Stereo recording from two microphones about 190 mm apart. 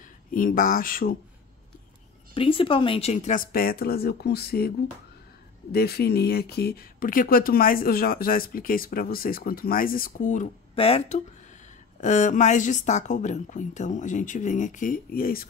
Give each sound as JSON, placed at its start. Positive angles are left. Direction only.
{"t": 0.3, "sound": "speech", "side_deg": 45}
{"t": 2.3, "sound": "speech", "side_deg": 30}